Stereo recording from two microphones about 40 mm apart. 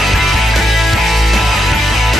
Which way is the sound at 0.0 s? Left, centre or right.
Centre.